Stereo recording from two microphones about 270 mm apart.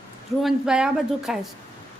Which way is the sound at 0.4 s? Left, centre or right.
Centre.